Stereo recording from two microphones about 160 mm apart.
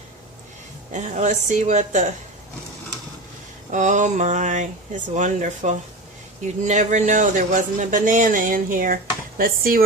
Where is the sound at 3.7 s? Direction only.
50° right (ahead or behind).